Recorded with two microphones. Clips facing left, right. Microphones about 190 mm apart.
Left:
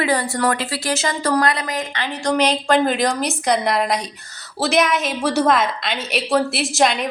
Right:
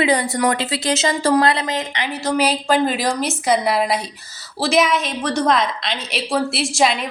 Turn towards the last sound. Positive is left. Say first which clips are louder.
# even
turn(degrees=0)  # may be behind; listen again after turning